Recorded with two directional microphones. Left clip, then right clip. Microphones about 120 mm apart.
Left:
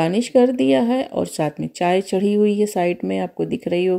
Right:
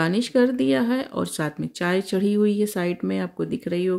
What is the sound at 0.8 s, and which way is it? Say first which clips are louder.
Speech: left 5 dB; 45° right (ahead or behind).